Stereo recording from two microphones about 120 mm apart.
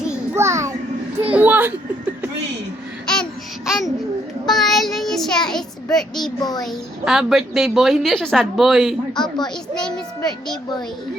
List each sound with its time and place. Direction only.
0.3 s a sound: 25° right (ahead or behind)
1.2 s children playing: 15° right (ahead or behind)
3.7 s a child's voice: centre (ahead or behind)
4.4 s child singing: centre (ahead or behind)
6.4 s a child's voice: 35° left (ahead or behind)
6.7 s a woman's voice: 5° right (ahead or behind)
9.1 s a child's voice: 35° left (ahead or behind)
9.7 s a woman's voice: 5° left (ahead or behind)